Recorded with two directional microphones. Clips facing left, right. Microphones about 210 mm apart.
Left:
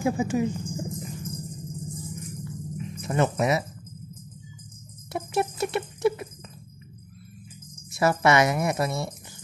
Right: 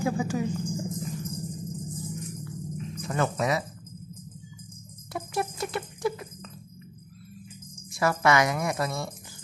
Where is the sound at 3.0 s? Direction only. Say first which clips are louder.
Left 3 dB; 25° left (ahead or behind).